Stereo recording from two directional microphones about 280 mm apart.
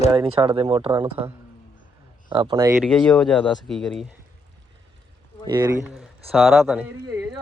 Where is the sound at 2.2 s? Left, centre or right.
Centre.